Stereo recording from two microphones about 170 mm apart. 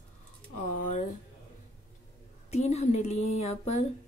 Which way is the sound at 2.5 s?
40° left (ahead or behind).